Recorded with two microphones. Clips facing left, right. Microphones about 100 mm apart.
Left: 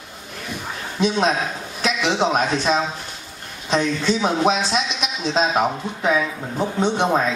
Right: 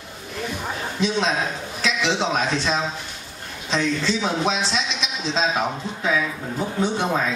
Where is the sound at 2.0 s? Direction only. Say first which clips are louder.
Left 4 dB; 15° left (ahead or behind).